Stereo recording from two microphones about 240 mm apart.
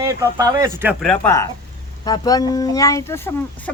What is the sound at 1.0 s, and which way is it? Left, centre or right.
Speech, centre.